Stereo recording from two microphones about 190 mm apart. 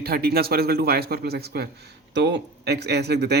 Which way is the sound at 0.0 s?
55° right (ahead or behind).